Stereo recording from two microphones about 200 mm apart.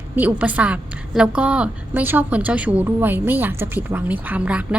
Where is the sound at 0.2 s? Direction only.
10° right (ahead or behind).